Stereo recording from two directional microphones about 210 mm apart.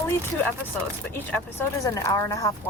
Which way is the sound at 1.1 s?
10° left (ahead or behind).